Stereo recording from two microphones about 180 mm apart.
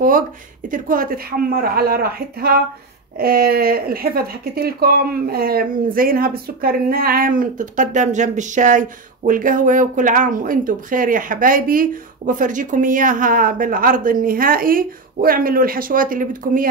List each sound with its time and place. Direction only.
0.7 s speech: 50° right (ahead or behind)